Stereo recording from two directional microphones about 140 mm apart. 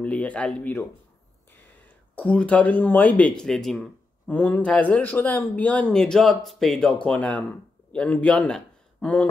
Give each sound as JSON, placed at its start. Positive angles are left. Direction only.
{"t": 0.0, "sound": "speech", "side_deg": 10}
{"t": 2.1, "sound": "speech", "side_deg": 10}